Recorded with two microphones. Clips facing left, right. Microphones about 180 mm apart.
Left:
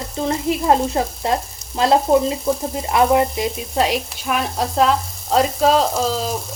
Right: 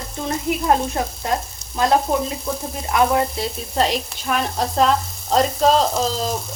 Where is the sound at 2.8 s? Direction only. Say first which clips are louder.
Left 2 dB; 20° left (ahead or behind).